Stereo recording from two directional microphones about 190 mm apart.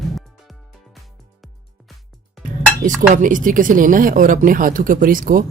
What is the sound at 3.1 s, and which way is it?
Speech, 45° right (ahead or behind).